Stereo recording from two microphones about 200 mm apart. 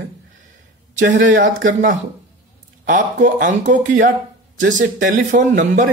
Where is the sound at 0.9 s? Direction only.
40° right (ahead or behind).